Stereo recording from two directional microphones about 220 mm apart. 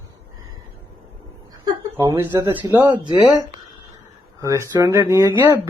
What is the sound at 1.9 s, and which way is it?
Speech, 10° right (ahead or behind).